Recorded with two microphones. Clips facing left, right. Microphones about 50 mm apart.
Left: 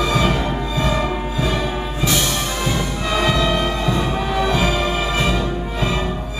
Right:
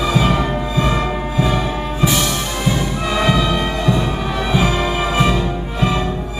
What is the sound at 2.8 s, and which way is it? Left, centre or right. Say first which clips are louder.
Music: right 2 dB; centre.